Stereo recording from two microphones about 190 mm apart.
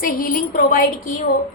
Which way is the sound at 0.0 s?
50° left (ahead or behind).